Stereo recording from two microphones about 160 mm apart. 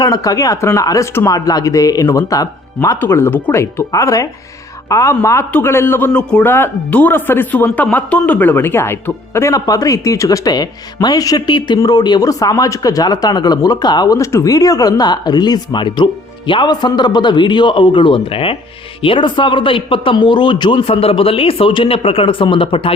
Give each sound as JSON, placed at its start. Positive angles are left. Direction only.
{"t": 0.0, "sound": "a man's voice", "side_deg": 20}